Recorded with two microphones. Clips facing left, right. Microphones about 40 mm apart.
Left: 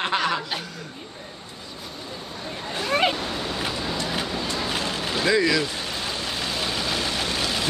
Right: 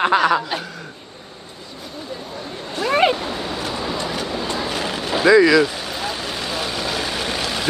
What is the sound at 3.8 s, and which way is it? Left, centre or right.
Vehicle, centre.